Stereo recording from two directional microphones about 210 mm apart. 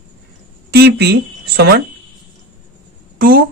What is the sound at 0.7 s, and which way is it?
Speech, 50° right (ahead or behind).